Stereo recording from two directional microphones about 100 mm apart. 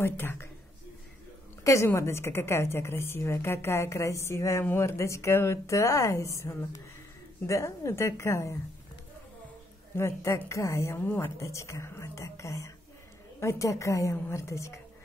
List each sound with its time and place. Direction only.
0.0 s a woman's voice: 25° left (ahead or behind)
1.6 s a woman's voice: 30° left (ahead or behind)
9.9 s a woman's voice: 30° left (ahead or behind)